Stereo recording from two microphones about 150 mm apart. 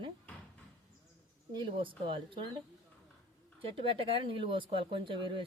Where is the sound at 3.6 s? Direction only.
35° right (ahead or behind).